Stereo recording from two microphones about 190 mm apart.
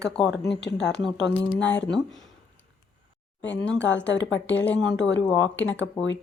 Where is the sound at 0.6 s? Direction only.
65° left (ahead or behind).